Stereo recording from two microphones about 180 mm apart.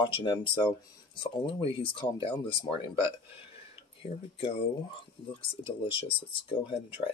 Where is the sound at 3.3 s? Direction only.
30° left (ahead or behind).